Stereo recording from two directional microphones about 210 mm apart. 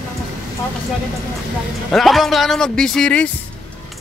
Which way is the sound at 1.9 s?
Centre (ahead or behind).